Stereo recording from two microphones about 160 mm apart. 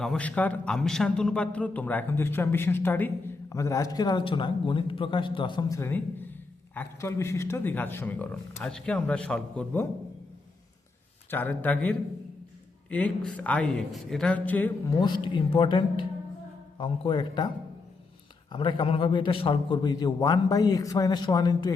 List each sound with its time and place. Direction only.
0.0 s a man's voice: 5° left (ahead or behind)
11.3 s a man's voice: 10° left (ahead or behind)
14.9 s speech: 30° left (ahead or behind)
18.5 s a man's voice: 30° left (ahead or behind)